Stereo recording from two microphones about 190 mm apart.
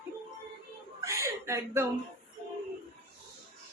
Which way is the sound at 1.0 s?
15° right (ahead or behind).